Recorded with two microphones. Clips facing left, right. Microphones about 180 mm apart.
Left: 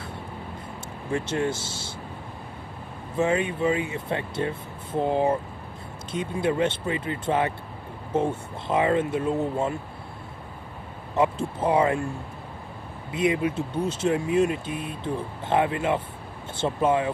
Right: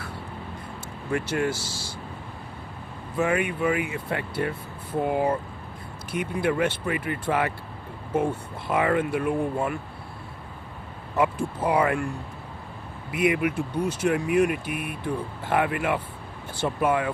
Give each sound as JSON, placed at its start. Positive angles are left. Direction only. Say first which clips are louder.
{"t": 1.1, "sound": "speech", "louder": "even", "side_deg": 25}
{"t": 3.2, "sound": "speech", "louder": "left 1 dB", "side_deg": 25}
{"t": 11.1, "sound": "speech", "louder": "left 1 dB", "side_deg": 25}
{"t": 13.1, "sound": "speech", "louder": "even", "side_deg": 25}